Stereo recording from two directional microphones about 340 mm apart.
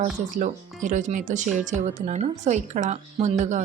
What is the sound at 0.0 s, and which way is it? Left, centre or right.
Speech, right.